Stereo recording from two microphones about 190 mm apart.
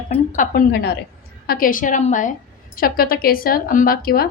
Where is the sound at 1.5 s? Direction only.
45° left (ahead or behind).